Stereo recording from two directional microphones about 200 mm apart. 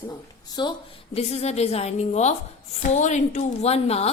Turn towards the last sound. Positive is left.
turn(degrees=30)  # may be behind; listen again after turning